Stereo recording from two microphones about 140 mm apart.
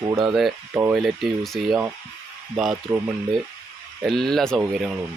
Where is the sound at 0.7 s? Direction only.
15° right (ahead or behind).